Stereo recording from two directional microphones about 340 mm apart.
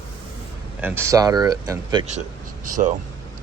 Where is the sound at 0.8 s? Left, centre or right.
Centre; by 2.9 s right.